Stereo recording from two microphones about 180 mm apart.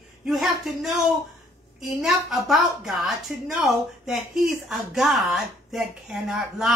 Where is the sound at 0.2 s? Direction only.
Centre (ahead or behind).